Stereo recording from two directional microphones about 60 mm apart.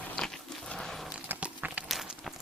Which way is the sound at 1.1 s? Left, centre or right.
Right.